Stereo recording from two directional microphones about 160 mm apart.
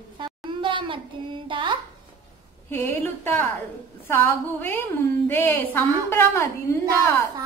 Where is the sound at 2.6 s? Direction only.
15° left (ahead or behind).